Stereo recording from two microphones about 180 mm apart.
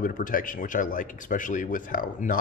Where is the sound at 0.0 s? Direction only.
50° left (ahead or behind).